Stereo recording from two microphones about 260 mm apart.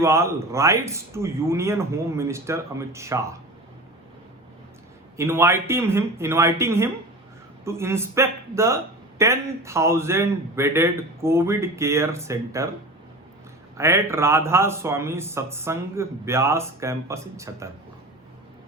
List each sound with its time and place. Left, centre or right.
0.0 s speech: centre
5.1 s speech: centre
13.7 s speech: centre